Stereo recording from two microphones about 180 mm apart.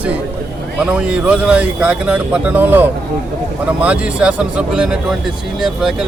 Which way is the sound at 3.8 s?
5° right (ahead or behind).